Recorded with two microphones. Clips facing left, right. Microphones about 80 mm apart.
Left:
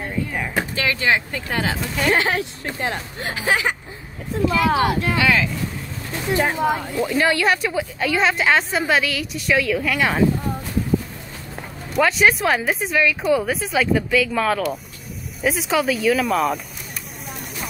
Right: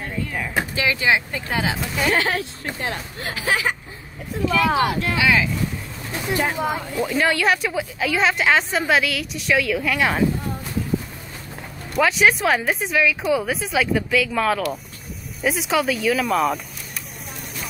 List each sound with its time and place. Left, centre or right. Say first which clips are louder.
0.6 s speech: right 1 dB; centre
2.1 s speech: left 1 dB; left
5.1 s speech: even; centre
7.0 s a woman's voice: even; centre
11.9 s a woman's voice: left 1 dB; centre